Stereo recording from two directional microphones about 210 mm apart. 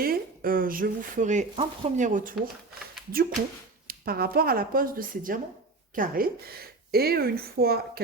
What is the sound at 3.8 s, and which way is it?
A woman's voice, 45° right (ahead or behind).